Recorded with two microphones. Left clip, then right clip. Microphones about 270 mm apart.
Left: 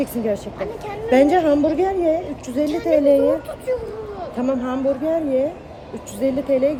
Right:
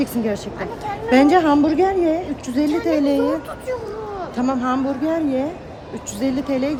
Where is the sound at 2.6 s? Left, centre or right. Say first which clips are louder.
Right 2 dB; centre.